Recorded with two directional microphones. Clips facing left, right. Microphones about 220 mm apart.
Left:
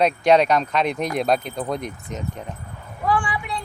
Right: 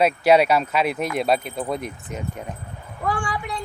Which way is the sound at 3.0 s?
45° right (ahead or behind).